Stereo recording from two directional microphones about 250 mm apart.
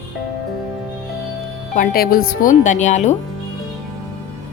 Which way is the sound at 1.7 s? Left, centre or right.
Left.